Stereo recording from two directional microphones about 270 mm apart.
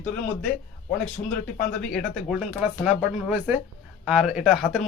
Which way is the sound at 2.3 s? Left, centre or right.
Centre.